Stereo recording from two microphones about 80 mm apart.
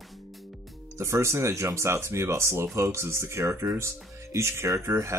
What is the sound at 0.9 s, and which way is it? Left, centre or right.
Speech, right.